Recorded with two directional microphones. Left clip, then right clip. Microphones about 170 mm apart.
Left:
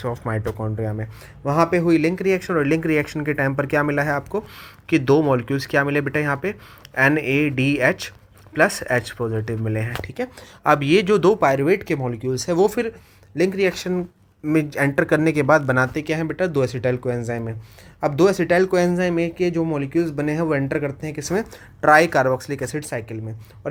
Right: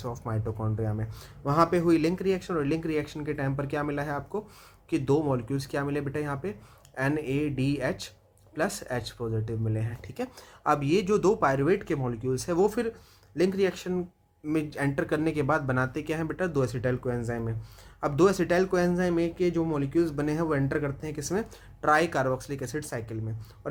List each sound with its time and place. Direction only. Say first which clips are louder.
0.0 s speech: left 9 dB; 25° left (ahead or behind)